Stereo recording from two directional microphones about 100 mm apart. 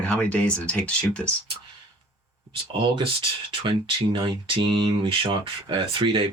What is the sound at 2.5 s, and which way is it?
Speech, 60° right (ahead or behind).